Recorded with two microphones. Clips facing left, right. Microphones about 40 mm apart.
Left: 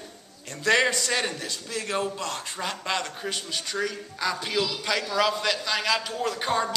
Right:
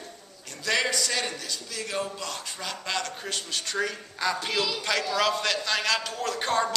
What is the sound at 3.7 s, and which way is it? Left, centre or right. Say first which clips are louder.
Speech: even; centre.